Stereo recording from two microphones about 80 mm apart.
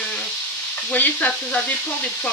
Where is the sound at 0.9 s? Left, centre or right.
Left.